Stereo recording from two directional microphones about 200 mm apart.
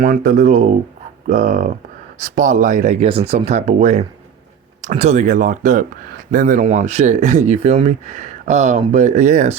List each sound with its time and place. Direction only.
0.0 s speech: 40° right (ahead or behind)